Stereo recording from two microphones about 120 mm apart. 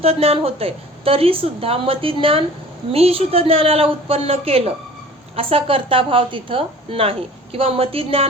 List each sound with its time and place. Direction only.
0.0 s a woman's voice: 55° right (ahead or behind)